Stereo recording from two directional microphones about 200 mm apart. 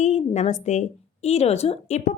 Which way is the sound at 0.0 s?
35° left (ahead or behind).